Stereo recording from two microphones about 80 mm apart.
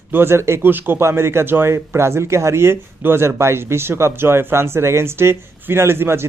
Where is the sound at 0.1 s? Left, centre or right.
Right.